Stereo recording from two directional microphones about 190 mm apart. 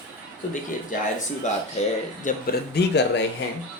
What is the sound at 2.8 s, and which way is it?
Speech, 60° left (ahead or behind).